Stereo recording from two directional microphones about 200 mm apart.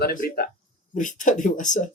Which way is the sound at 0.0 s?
45° left (ahead or behind).